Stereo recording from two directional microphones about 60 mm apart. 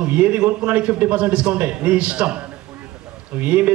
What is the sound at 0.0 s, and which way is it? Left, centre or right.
A man's voice, right.